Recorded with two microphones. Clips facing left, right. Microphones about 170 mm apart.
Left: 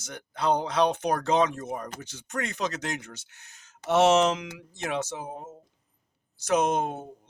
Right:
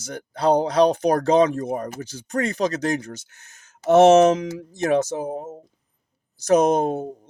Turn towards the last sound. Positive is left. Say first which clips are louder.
# right 7 dB
turn(degrees=-40)  # may be behind; listen again after turning